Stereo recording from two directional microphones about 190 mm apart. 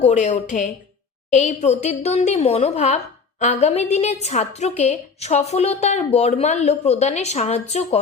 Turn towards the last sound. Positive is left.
turn(degrees=35)  # may be behind; listen again after turning